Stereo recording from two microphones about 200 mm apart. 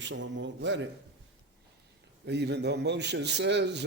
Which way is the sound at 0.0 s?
65° right (ahead or behind).